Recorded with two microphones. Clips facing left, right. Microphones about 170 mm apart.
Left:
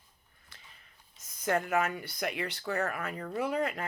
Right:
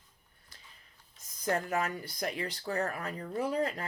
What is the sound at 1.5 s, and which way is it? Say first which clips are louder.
Speech: left 2 dB; 35° right (ahead or behind).